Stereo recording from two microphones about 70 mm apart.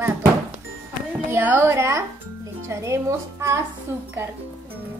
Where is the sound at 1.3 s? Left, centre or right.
Right.